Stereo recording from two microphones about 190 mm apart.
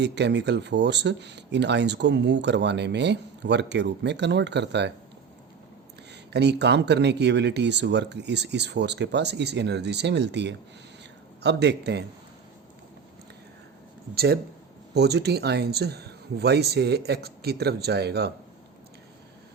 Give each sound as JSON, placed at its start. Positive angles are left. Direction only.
{"t": 0.0, "sound": "speech", "side_deg": -65}
{"t": 6.1, "sound": "speech", "side_deg": -60}
{"t": 14.9, "sound": "speech", "side_deg": -60}